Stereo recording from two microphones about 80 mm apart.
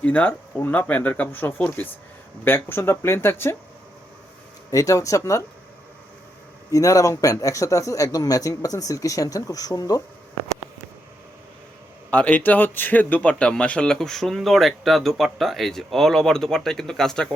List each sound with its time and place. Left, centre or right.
0.0 s speech: centre
4.7 s speech: left
6.7 s speech: left
12.1 s speech: centre